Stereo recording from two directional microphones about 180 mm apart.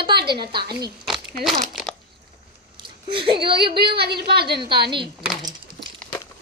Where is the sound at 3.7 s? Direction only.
65° right (ahead or behind).